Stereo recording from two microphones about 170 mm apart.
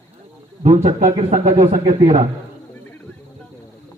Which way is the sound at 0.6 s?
45° right (ahead or behind).